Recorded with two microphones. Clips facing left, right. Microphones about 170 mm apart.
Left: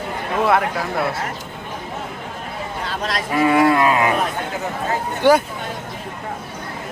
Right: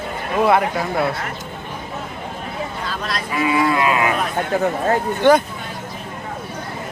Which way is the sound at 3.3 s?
50° left (ahead or behind).